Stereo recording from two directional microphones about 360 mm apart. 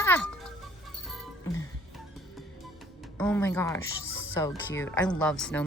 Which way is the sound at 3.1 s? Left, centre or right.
Centre.